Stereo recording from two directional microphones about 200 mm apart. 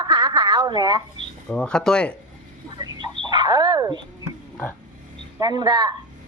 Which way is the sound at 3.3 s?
20° right (ahead or behind).